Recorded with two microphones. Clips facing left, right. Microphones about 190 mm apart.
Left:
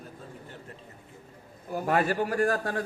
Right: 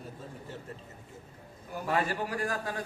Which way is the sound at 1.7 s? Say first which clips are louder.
Left 5 dB; 50° left (ahead or behind).